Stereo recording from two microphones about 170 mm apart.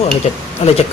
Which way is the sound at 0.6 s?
40° left (ahead or behind).